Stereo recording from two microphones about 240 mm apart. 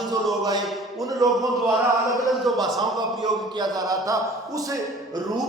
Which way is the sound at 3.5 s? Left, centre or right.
Centre.